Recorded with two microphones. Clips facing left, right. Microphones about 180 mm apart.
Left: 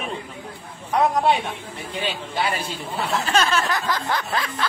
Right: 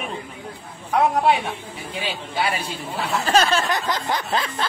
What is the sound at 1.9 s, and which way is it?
Speech, 10° right (ahead or behind).